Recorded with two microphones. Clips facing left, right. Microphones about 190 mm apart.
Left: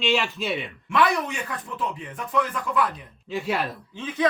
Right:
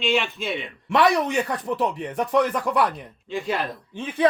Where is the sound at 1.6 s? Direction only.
70° right (ahead or behind).